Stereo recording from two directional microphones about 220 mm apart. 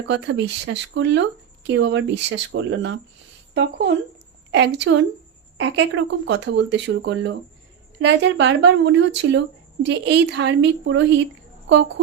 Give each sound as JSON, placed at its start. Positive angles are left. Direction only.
{"t": 0.0, "sound": "speech", "side_deg": -55}